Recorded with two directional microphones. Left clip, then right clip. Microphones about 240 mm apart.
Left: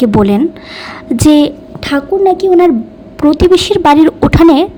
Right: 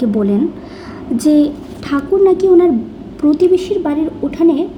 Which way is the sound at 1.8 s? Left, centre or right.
Left.